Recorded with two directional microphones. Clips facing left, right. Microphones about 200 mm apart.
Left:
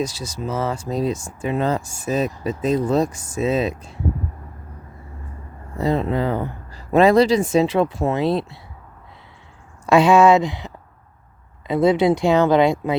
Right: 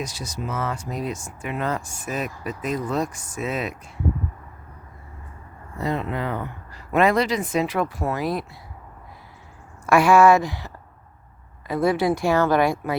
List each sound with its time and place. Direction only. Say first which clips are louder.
0.0 s speech: left 5 dB; 30° left (ahead or behind)
5.7 s speech: left 6 dB; 30° left (ahead or behind)
9.8 s speech: left 2 dB; 20° left (ahead or behind)
11.7 s speech: left 5 dB; 20° left (ahead or behind)